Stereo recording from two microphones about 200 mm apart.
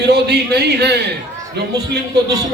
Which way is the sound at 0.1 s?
55° right (ahead or behind).